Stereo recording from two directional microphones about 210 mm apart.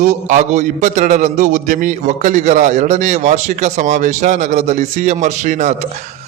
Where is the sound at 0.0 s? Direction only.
35° right (ahead or behind).